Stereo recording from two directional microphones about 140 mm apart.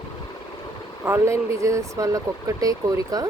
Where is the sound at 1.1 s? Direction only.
20° right (ahead or behind).